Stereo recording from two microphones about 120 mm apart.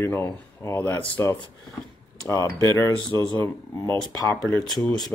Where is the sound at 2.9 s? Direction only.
40° right (ahead or behind).